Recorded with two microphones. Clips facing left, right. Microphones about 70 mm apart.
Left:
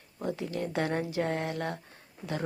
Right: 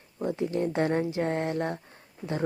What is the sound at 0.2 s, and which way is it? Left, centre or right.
Speech, right.